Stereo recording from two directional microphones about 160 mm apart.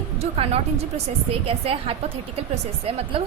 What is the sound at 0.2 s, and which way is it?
A woman's voice, 40° right (ahead or behind).